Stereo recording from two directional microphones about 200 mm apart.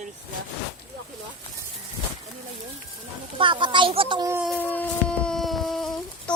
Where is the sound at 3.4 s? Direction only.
25° right (ahead or behind).